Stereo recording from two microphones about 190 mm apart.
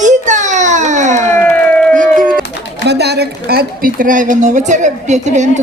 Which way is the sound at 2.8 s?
60° right (ahead or behind).